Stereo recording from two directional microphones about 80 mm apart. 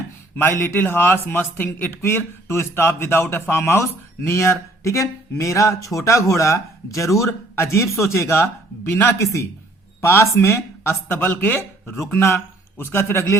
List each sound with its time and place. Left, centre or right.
0.3 s speech: left